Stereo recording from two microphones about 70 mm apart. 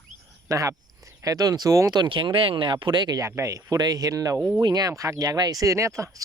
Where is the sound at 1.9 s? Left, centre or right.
Right.